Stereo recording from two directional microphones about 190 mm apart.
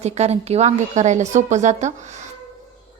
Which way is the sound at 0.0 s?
35° right (ahead or behind).